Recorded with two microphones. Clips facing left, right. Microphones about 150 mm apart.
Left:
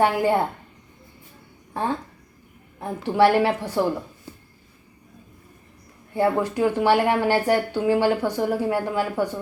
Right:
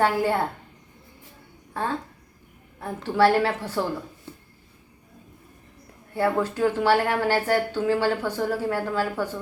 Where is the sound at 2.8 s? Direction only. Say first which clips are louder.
Left 2 dB; 15° left (ahead or behind).